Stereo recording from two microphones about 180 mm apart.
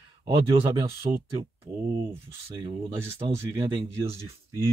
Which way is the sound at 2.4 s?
30° right (ahead or behind).